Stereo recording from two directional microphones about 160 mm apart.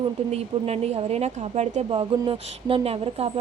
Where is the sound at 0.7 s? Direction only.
40° right (ahead or behind).